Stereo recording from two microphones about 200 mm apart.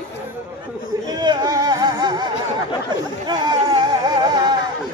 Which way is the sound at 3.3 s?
20° right (ahead or behind).